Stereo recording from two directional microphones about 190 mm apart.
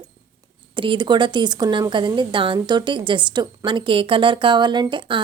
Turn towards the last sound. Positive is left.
turn(degrees=-25)  # may be behind; listen again after turning